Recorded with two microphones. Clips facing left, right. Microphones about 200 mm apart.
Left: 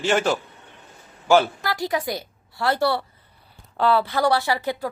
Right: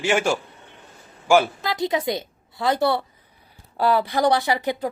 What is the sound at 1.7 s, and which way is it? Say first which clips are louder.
A woman's voice: right 3 dB; 20° right (ahead or behind).